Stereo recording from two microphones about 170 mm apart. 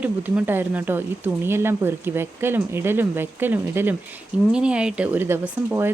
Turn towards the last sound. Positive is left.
turn(degrees=-15)  # may be behind; listen again after turning